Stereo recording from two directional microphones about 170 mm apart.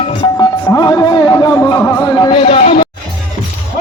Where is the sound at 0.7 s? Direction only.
20° left (ahead or behind).